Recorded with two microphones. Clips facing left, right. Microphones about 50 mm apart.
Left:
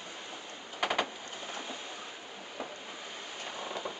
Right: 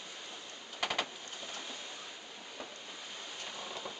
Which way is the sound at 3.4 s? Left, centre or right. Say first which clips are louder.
Left 6 dB; centre.